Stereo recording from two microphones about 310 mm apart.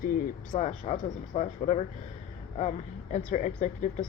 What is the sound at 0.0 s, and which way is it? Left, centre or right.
Speech, left.